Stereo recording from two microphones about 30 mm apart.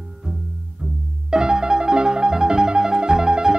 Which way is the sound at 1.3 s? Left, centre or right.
Right.